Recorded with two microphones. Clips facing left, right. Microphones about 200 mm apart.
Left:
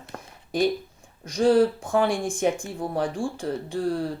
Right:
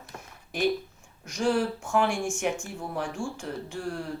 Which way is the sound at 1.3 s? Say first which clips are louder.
Left 7 dB; 35° left (ahead or behind).